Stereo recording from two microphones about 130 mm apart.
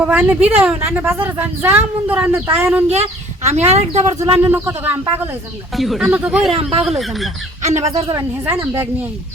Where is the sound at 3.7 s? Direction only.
55° right (ahead or behind).